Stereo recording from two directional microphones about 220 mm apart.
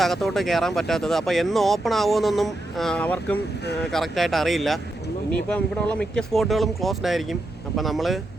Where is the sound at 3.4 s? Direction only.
50° left (ahead or behind).